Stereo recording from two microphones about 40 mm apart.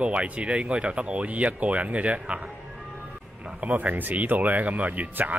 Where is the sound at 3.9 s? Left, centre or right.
Right.